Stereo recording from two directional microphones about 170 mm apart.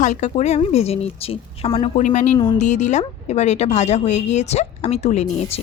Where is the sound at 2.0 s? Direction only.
45° left (ahead or behind).